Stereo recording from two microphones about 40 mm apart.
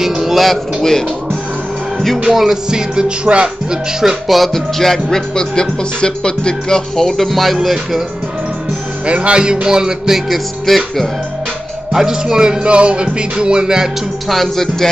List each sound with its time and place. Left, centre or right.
0.2 s speech: centre
2.3 s music: centre
2.7 s music: right
4.3 s music: centre
7.2 s speech: centre
9.0 s speech: right
9.4 s music: centre
10.7 s music: centre
11.9 s music: centre
14.3 s music: centre